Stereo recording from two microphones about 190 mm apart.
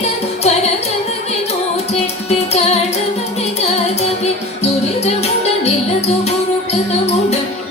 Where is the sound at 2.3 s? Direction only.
35° left (ahead or behind).